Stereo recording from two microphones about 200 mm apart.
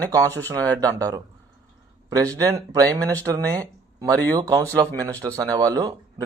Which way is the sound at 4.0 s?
20° right (ahead or behind).